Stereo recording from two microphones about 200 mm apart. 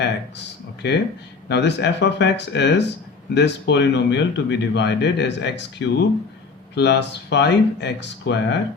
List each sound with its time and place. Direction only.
0.0 s speech: 55° left (ahead or behind)